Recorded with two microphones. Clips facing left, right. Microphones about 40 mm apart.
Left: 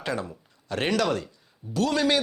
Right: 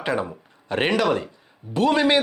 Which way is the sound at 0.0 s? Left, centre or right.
Right.